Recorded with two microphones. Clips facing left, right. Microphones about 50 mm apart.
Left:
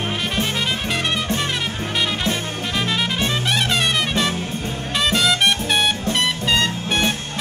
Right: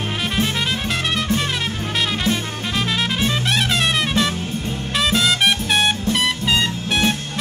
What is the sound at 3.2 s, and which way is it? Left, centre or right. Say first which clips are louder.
Music: right 1 dB; centre.